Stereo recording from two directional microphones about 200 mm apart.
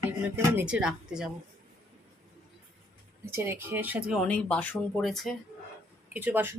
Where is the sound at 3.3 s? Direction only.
10° right (ahead or behind).